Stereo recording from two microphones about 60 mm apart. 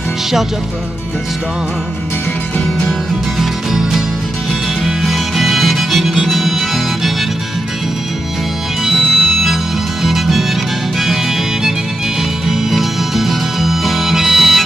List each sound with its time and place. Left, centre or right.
3.3 s music: centre
6.2 s harmonica: centre
8.8 s music: centre
12.4 s music: centre